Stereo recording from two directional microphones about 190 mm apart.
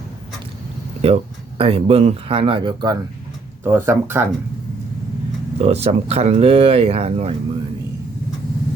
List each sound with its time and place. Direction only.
1.0 s speech: 30° right (ahead or behind); by 4.3 s 15° right (ahead or behind)
5.5 s speech: 35° right (ahead or behind)